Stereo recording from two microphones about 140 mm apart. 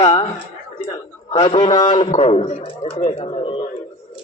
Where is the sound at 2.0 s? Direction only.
50° left (ahead or behind).